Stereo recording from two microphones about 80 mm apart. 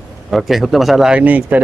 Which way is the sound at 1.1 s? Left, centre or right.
Centre.